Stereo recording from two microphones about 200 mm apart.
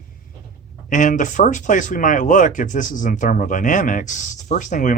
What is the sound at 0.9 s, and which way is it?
Speech, 40° left (ahead or behind).